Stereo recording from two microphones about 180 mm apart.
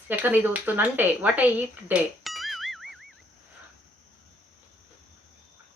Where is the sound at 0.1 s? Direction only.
10° right (ahead or behind).